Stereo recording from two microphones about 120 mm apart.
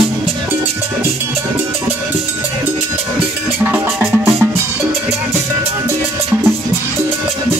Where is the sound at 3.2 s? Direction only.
20° right (ahead or behind).